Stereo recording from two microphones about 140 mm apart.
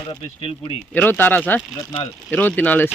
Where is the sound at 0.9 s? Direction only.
10° left (ahead or behind).